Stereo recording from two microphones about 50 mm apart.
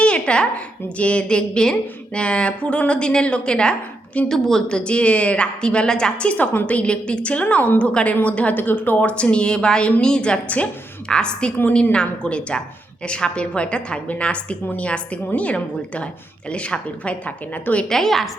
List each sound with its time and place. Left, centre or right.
0.0 s a sound: left
0.9 s a woman's voice: left
17.8 s a woman's voice: centre